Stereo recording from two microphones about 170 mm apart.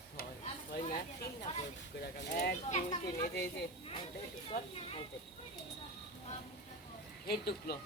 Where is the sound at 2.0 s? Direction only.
65° left (ahead or behind).